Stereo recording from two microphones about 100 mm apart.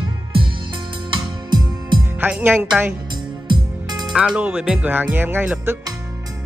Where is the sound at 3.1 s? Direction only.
50° right (ahead or behind).